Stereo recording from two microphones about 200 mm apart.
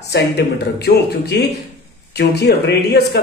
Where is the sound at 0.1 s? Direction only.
55° left (ahead or behind).